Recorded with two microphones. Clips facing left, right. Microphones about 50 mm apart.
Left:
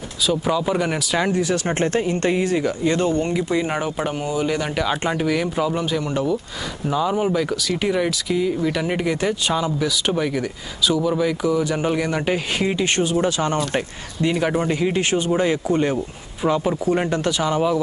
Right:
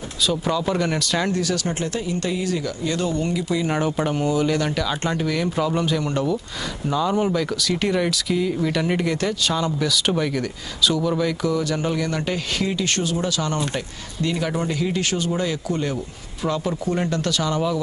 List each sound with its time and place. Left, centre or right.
0.3 s speech: centre
1.7 s speech: left
3.6 s speech: centre